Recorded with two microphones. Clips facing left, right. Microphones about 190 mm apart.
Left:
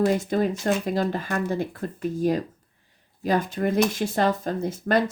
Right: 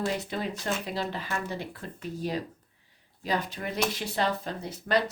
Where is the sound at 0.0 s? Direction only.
45° left (ahead or behind).